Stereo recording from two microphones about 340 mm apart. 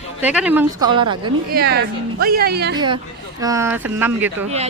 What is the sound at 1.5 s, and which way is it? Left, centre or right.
Speech, right.